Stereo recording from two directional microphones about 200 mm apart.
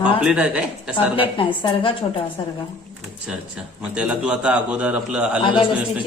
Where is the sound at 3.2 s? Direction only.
5° right (ahead or behind).